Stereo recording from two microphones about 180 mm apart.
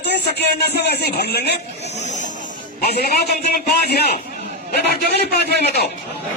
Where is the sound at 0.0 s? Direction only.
65° left (ahead or behind).